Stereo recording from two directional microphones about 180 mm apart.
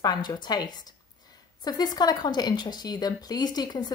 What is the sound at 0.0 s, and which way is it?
Speech, 20° left (ahead or behind).